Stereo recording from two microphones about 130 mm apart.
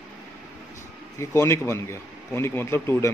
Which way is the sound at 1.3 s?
20° left (ahead or behind).